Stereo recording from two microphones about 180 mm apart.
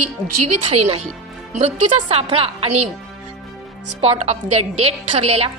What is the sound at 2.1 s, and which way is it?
Speech, 35° right (ahead or behind).